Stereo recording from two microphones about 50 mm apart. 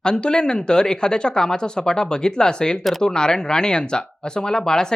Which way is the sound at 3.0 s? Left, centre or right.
Centre.